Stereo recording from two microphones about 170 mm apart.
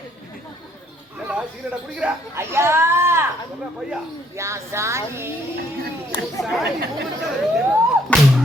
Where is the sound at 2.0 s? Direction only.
10° right (ahead or behind).